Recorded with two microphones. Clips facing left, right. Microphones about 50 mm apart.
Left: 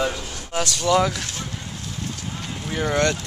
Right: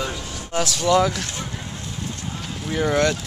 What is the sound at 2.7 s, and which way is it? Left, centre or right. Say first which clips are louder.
Speech: right 2 dB; centre.